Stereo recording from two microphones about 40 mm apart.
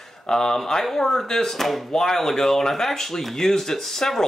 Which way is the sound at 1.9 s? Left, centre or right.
Centre.